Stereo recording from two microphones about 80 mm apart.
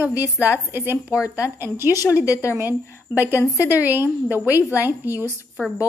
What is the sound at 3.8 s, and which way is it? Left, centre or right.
Speech, right.